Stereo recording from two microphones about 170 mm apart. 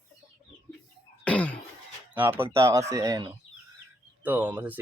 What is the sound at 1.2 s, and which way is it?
Cough, 5° left (ahead or behind).